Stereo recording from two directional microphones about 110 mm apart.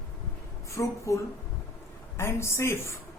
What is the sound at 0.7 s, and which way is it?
Speech, 25° left (ahead or behind).